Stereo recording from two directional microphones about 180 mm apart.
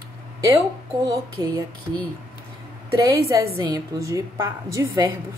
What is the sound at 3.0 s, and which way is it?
A woman's voice, 15° right (ahead or behind).